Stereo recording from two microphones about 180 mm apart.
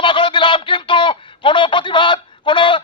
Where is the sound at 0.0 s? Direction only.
25° left (ahead or behind).